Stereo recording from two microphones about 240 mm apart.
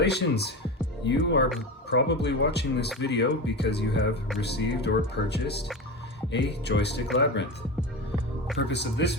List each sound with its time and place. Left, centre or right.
0.0 s speech: left
8.6 s speech: left